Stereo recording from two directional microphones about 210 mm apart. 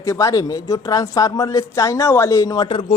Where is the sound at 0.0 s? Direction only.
15° left (ahead or behind).